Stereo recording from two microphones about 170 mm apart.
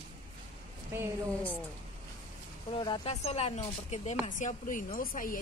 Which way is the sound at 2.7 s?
30° left (ahead or behind).